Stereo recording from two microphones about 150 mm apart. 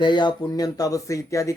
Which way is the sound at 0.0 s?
30° left (ahead or behind).